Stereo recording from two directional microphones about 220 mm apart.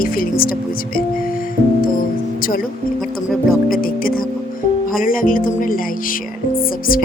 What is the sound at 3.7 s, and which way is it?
Speech, 40° left (ahead or behind).